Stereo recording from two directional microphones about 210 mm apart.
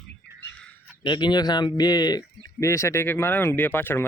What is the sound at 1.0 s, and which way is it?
Speech, 20° left (ahead or behind).